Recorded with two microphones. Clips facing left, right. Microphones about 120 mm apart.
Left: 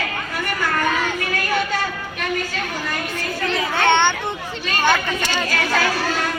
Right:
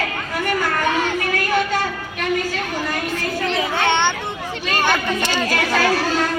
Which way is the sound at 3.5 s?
15° right (ahead or behind).